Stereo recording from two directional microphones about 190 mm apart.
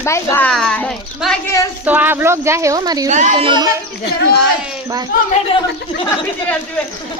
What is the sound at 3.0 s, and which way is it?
Speech, 40° right (ahead or behind).